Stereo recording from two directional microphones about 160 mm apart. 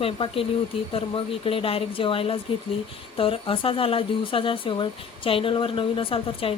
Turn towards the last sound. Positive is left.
turn(degrees=35)  # may be behind; listen again after turning